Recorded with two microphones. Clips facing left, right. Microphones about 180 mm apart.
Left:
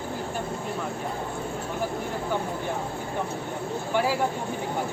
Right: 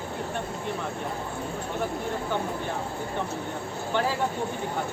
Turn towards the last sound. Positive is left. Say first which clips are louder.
# left 2 dB
turn(degrees=10)  # may be behind; listen again after turning